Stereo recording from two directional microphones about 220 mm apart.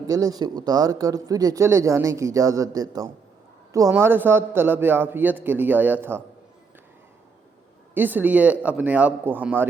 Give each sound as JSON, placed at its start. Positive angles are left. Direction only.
{"t": 0.1, "sound": "speech", "side_deg": -15}
{"t": 7.9, "sound": "speech", "side_deg": -10}